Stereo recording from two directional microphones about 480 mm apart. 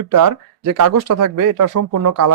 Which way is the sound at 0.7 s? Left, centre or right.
Right.